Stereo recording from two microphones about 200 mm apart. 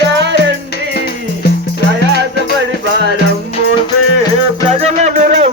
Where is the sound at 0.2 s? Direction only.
60° right (ahead or behind).